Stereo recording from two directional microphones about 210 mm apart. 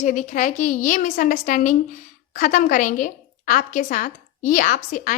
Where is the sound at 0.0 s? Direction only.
35° left (ahead or behind).